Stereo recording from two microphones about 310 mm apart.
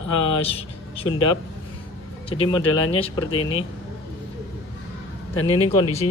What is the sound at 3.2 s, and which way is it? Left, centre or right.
Speech, left.